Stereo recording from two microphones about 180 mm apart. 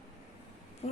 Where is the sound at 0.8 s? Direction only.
35° left (ahead or behind).